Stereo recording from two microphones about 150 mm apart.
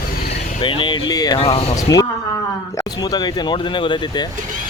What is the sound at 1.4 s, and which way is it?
Speech, 40° left (ahead or behind).